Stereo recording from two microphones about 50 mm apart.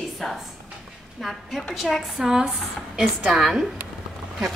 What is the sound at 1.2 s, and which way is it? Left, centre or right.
A woman's voice, centre.